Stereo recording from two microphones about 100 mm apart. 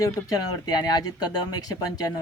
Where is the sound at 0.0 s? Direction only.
40° left (ahead or behind).